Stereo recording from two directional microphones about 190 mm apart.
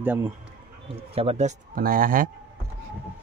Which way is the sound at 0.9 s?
30° right (ahead or behind).